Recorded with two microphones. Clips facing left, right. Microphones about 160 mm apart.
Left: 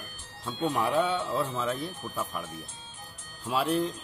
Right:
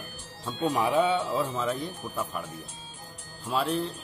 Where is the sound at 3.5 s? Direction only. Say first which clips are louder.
Left 1 dB; 10° left (ahead or behind).